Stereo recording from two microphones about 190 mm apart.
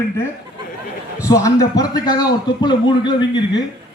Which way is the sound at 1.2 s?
15° left (ahead or behind).